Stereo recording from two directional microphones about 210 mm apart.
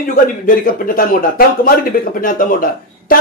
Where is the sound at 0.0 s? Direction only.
45° left (ahead or behind).